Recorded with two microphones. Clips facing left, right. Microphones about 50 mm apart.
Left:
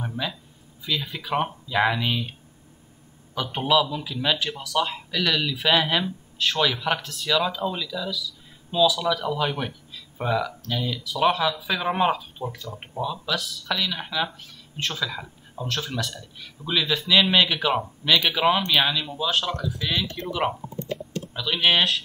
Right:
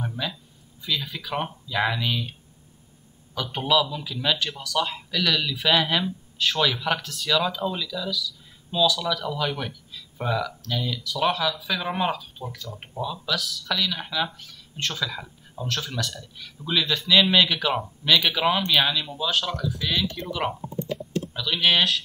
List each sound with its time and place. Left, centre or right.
0.0 s speech: centre
3.5 s speech: centre